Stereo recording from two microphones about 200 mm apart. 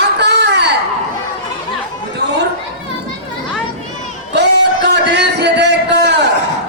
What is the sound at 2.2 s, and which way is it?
Chatter, 55° right (ahead or behind).